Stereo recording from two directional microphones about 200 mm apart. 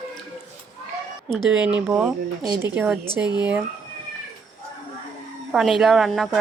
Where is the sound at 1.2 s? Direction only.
5° right (ahead or behind).